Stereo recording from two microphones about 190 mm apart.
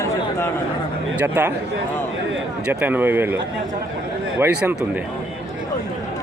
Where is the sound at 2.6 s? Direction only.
10° right (ahead or behind).